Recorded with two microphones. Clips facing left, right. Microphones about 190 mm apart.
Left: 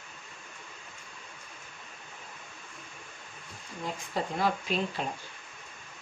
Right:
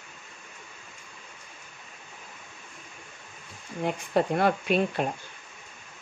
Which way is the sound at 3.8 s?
60° right (ahead or behind).